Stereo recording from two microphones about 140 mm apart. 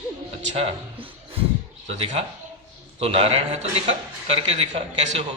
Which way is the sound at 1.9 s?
40° right (ahead or behind).